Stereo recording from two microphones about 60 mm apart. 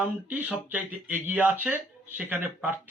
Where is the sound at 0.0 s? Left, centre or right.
Right.